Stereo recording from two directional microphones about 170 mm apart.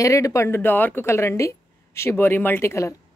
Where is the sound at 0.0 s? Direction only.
20° left (ahead or behind).